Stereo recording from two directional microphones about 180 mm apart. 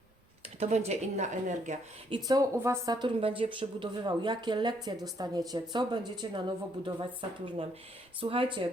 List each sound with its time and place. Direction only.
0.6 s a woman's voice: 35° right (ahead or behind)
2.0 s a woman's voice: 25° right (ahead or behind)